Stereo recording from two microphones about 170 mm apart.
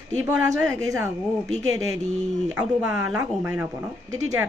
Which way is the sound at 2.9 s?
20° right (ahead or behind).